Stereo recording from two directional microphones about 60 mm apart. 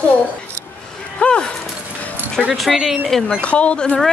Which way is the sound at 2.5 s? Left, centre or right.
Centre.